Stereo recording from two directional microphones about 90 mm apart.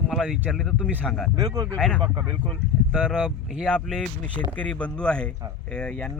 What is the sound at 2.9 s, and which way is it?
Speech, 5° right (ahead or behind).